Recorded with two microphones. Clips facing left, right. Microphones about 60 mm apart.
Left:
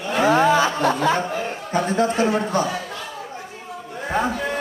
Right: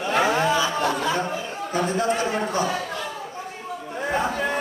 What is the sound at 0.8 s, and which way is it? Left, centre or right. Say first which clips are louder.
A man's voice: left 4 dB; left.